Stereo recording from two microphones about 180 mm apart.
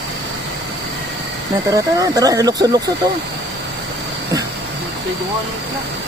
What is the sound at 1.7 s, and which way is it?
Speech, 20° right (ahead or behind).